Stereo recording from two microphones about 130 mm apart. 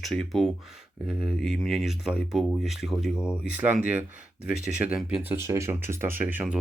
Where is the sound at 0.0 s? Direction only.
Centre (ahead or behind).